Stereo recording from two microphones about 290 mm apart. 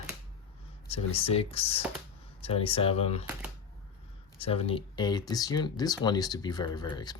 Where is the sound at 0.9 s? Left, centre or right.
Centre.